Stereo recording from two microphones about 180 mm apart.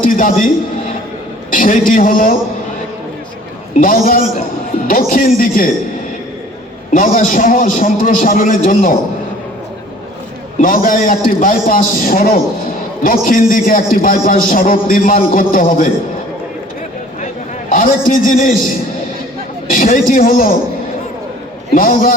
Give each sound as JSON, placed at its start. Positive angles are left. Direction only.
{"t": 0.0, "sound": "a man's voice", "side_deg": 50}
{"t": 1.5, "sound": "a man's voice", "side_deg": 50}
{"t": 3.8, "sound": "a man's voice", "side_deg": 50}
{"t": 6.9, "sound": "a man's voice", "side_deg": 50}
{"t": 10.6, "sound": "a man's voice", "side_deg": 50}
{"t": 17.7, "sound": "a man's voice", "side_deg": 50}
{"t": 19.6, "sound": "a man's voice", "side_deg": 50}
{"t": 21.8, "sound": "a man's voice", "side_deg": 50}